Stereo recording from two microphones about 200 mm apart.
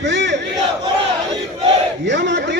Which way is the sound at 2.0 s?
60° right (ahead or behind).